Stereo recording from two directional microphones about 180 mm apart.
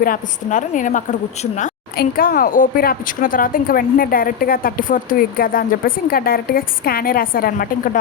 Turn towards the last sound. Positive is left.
turn(degrees=55)  # may be behind; listen again after turning